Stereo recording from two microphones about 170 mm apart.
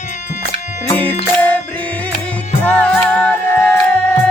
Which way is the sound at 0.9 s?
10° left (ahead or behind).